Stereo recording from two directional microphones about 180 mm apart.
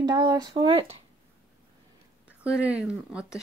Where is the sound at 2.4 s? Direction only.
5° right (ahead or behind).